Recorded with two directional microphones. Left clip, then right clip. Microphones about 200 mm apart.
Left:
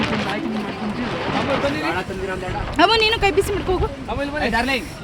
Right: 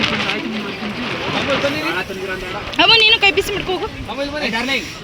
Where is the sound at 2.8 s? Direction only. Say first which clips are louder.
Right 5 dB; 25° left (ahead or behind).